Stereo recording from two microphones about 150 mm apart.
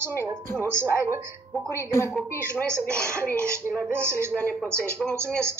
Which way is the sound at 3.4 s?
20° right (ahead or behind).